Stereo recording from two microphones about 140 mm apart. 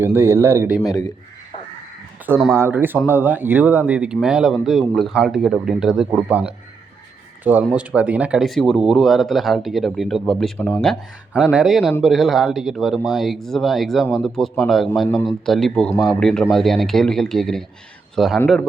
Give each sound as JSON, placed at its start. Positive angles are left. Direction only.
{"t": 0.2, "sound": "speech", "side_deg": -20}
{"t": 0.8, "sound": "speech", "side_deg": 25}
{"t": 2.6, "sound": "speech", "side_deg": -15}